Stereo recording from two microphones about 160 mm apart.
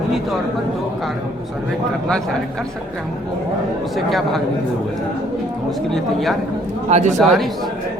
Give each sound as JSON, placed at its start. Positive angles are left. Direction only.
{"t": 3.9, "sound": "a woman's voice", "side_deg": 0}
{"t": 5.9, "sound": "a woman's voice", "side_deg": 0}
{"t": 6.9, "sound": "a man's voice", "side_deg": -50}
{"t": 7.2, "sound": "a woman's voice", "side_deg": 0}